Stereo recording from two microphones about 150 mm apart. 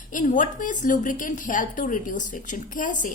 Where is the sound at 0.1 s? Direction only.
60° left (ahead or behind).